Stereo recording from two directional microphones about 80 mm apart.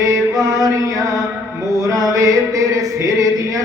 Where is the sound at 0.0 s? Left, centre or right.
Right.